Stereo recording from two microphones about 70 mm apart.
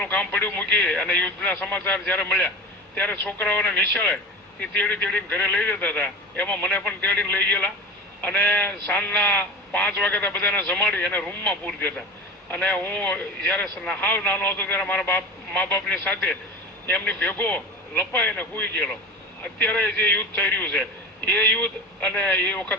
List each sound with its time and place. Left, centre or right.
0.0 s a man's voice: left